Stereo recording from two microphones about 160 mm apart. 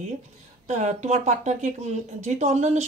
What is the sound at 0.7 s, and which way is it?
Speech, 45° right (ahead or behind).